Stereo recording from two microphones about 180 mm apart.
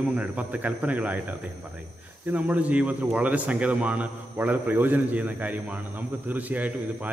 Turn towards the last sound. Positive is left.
turn(degrees=-10)  # may be behind; listen again after turning